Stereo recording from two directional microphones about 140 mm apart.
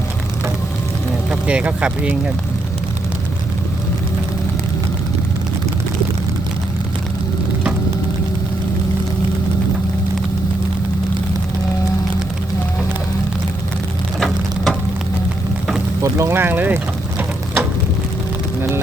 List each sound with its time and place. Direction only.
1.3 s speech: 10° right (ahead or behind)
14.2 s frying: 5° left (ahead or behind)
16.0 s vehicle: 20° right (ahead or behind)